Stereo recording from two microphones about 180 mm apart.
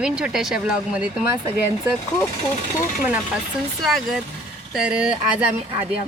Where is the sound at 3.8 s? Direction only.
Centre (ahead or behind).